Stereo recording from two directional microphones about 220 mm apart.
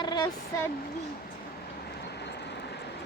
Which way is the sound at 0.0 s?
20° left (ahead or behind).